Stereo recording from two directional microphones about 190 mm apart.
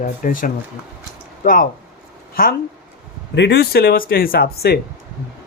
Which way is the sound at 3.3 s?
65° left (ahead or behind).